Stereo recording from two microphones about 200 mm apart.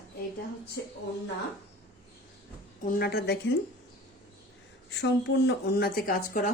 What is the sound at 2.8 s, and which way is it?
Speech, 50° left (ahead or behind).